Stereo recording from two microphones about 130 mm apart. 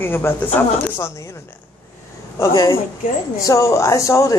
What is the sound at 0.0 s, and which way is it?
Speech, 15° left (ahead or behind).